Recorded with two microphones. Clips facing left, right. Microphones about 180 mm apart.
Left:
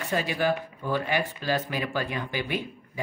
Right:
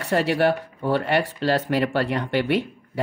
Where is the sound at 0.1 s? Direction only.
70° right (ahead or behind).